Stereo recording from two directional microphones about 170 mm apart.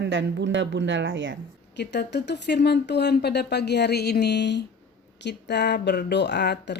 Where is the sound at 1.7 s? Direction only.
90° left.